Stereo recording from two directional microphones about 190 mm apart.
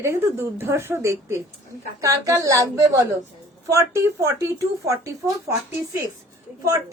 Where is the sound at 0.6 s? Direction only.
10° right (ahead or behind).